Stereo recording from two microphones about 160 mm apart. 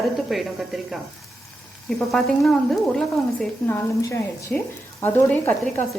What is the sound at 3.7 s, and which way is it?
A woman's voice, 20° left (ahead or behind).